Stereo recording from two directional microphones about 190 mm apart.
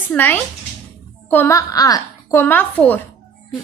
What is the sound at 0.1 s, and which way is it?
A woman's voice, 10° left (ahead or behind).